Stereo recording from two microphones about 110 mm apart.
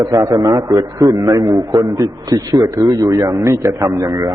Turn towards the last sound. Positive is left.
turn(degrees=-30)  # may be behind; listen again after turning